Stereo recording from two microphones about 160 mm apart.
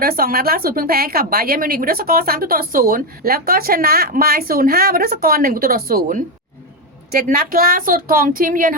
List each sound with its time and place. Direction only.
0.0 s a woman's voice: 65° right (ahead or behind)